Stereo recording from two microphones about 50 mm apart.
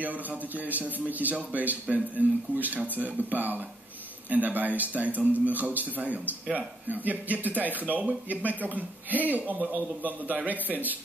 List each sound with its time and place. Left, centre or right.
0.0 s a man's voice: right